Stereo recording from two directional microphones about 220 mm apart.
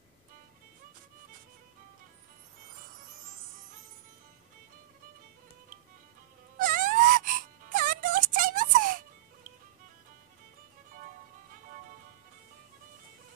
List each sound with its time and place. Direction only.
6.6 s wail: 40° right (ahead or behind)